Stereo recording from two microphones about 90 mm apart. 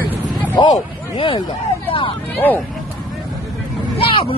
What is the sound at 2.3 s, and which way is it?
Speech, 20° left (ahead or behind).